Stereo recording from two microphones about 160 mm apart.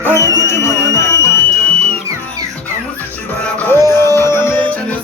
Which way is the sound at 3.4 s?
10° left (ahead or behind).